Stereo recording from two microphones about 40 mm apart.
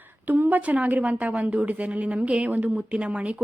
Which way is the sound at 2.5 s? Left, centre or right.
Right.